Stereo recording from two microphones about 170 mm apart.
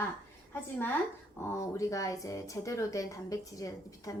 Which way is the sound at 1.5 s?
20° left (ahead or behind).